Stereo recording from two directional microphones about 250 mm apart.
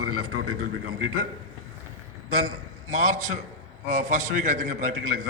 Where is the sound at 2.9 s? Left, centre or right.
Right.